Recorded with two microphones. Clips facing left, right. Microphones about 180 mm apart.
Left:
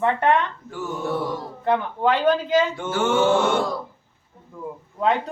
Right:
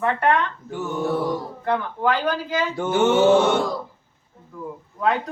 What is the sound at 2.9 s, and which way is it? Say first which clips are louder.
Mantra: right 4 dB; 20° right (ahead or behind).